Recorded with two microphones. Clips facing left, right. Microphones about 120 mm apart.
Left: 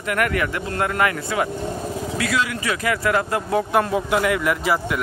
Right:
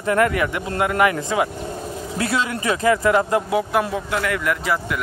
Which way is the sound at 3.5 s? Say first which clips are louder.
Left 4 dB; 10° right (ahead or behind).